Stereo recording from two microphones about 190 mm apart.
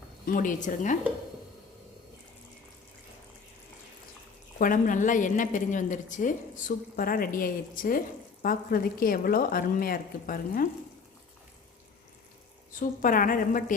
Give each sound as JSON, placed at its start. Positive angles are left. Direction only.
{"t": 0.3, "sound": "a woman's voice", "side_deg": 45}
{"t": 4.5, "sound": "a woman's voice", "side_deg": 45}
{"t": 12.8, "sound": "a woman's voice", "side_deg": 45}